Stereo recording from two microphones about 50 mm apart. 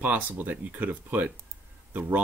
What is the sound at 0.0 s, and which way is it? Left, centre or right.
Speech, right.